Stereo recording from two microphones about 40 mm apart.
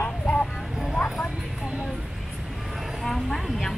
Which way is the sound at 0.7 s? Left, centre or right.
Centre.